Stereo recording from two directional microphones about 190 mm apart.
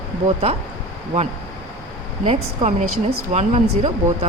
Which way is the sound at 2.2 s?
30° right (ahead or behind).